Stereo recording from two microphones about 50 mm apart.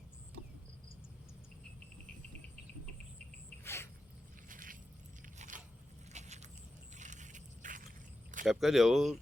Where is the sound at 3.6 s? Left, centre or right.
Left.